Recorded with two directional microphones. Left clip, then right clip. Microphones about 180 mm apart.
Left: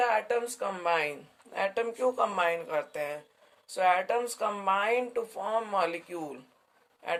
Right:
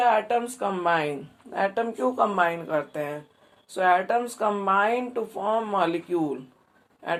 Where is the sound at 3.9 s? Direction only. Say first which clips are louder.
Right 5 dB; 65° left (ahead or behind).